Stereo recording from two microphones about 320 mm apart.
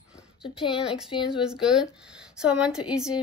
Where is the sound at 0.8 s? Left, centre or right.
Centre.